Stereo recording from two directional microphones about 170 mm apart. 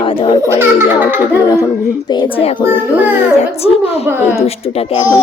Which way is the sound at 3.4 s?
35° left (ahead or behind).